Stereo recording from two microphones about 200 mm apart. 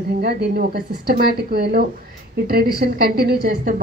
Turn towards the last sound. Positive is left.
turn(degrees=-50)  # may be behind; listen again after turning